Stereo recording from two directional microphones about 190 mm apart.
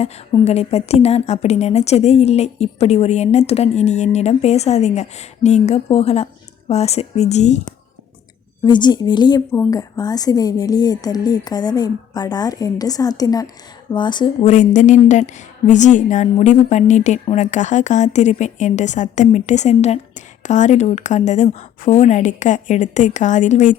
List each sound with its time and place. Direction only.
0.0 s a woman's voice: 30° left (ahead or behind)
8.6 s a woman's voice: 25° left (ahead or behind)
14.4 s a woman's voice: 40° left (ahead or behind)